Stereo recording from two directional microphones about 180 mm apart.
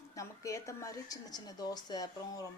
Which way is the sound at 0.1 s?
15° left (ahead or behind).